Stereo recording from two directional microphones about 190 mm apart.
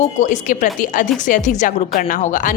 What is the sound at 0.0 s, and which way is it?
Speech, 40° left (ahead or behind).